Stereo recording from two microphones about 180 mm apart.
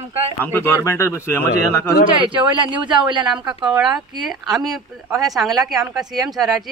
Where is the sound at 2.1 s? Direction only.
30° right (ahead or behind).